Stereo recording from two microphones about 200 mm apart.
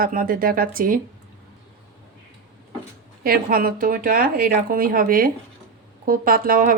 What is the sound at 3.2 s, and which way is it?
A woman's voice, 45° right (ahead or behind).